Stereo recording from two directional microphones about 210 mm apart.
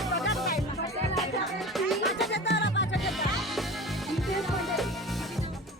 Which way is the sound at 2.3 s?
55° left (ahead or behind).